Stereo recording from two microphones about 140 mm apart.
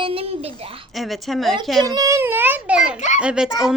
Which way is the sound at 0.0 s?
40° right (ahead or behind).